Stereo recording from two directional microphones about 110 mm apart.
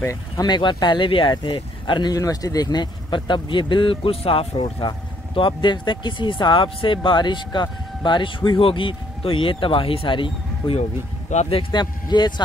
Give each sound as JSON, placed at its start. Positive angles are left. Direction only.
{"t": 0.0, "sound": "speech", "side_deg": 30}
{"t": 0.5, "sound": "speech", "side_deg": 40}
{"t": 10.8, "sound": "speech", "side_deg": 90}
{"t": 11.4, "sound": "speech", "side_deg": 50}